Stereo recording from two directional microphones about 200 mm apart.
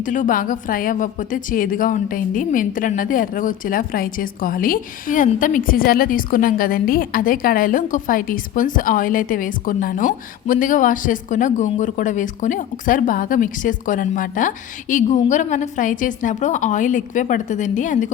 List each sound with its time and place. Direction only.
0.0 s a woman's voice: 40° left (ahead or behind)